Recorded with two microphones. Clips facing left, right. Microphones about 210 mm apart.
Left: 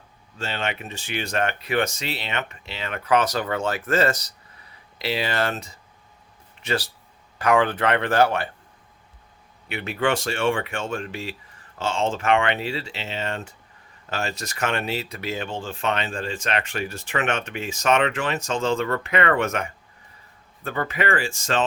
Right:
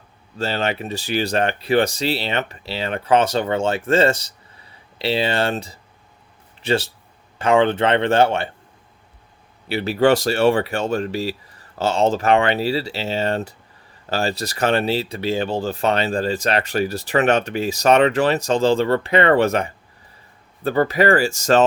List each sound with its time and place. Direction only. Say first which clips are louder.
0.3 s speech: right 6 dB; 35° right (ahead or behind)
9.6 s speech: right 8 dB; 35° right (ahead or behind)